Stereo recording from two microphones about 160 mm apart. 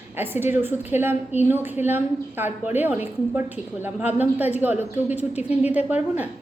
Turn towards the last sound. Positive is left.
turn(degrees=-10)  # may be behind; listen again after turning